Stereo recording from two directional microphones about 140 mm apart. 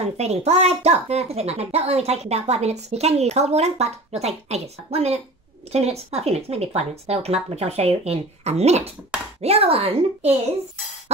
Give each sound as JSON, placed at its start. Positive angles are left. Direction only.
{"t": 0.0, "sound": "a woman's voice", "side_deg": -50}